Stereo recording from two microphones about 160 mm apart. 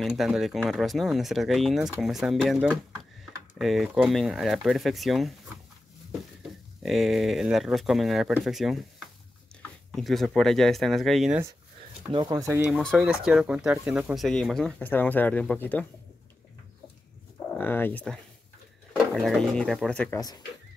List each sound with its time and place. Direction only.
0.0 s speech: centre (ahead or behind)
6.8 s speech: centre (ahead or behind)
9.9 s speech: centre (ahead or behind)
12.1 s speech: 25° right (ahead or behind)
12.7 s speech: centre (ahead or behind)
17.6 s speech: 15° left (ahead or behind)
20.2 s speech: 25° left (ahead or behind)